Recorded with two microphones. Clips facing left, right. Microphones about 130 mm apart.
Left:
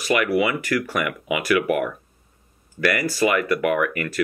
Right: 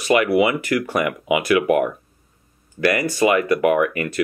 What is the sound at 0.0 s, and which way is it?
Speech, 25° right (ahead or behind).